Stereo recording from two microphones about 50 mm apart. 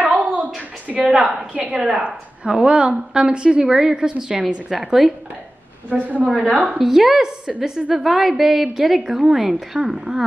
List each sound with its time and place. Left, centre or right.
0.1 s a sound: right
1.1 s a woman's voice: centre
1.5 s a woman's voice: right; by 5.1 s centre
6.0 s a woman's voice: right
6.8 s a woman's voice: centre; by 9.9 s right
9.9 s a woman's voice: centre